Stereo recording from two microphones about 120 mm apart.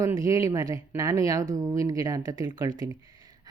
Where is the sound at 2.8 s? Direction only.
30° right (ahead or behind).